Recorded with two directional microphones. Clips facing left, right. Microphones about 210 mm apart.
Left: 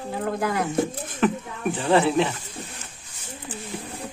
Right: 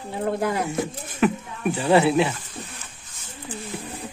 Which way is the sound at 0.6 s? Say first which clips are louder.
Left 2 dB; 10° right (ahead or behind).